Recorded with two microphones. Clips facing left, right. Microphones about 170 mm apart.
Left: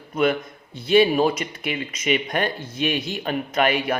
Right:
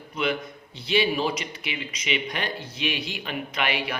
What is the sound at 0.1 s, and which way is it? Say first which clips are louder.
A man's voice: left 6 dB; 50° left (ahead or behind).